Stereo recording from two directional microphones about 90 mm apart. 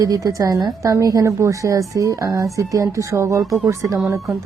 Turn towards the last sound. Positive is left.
turn(degrees=-35)  # may be behind; listen again after turning